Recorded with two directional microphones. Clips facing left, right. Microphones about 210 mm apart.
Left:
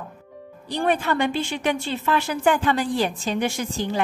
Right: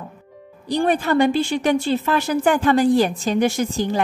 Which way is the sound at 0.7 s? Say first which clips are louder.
Right 4 dB; 35° right (ahead or behind).